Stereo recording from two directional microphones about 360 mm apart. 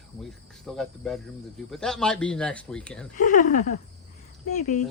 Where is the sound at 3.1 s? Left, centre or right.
Centre.